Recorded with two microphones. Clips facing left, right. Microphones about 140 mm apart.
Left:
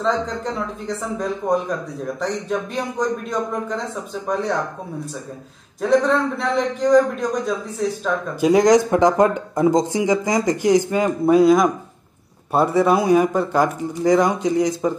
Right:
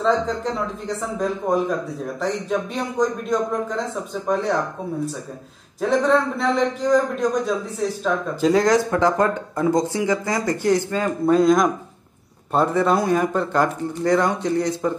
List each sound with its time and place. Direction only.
0.0 s a man's voice: centre (ahead or behind)
5.8 s a man's voice: centre (ahead or behind)
8.4 s speech: 15° left (ahead or behind)